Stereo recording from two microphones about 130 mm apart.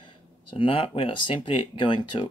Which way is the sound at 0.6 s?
45° left (ahead or behind).